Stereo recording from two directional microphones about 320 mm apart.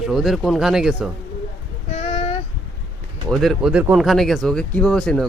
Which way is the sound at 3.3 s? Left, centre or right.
Centre.